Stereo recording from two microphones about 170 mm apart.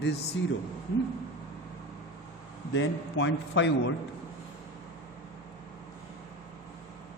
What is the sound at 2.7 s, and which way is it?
Speech, 90° left.